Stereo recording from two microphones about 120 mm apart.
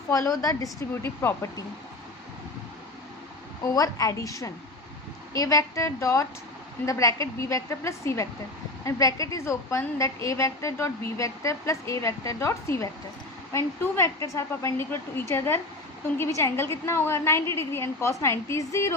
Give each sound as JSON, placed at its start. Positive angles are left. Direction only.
{"t": 0.1, "sound": "a woman's voice", "side_deg": 30}
{"t": 3.8, "sound": "a woman's voice", "side_deg": 30}